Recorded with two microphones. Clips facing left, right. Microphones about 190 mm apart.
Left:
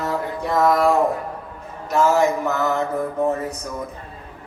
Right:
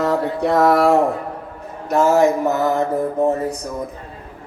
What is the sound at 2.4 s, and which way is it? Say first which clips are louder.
Mantra: right 4 dB; 45° right (ahead or behind).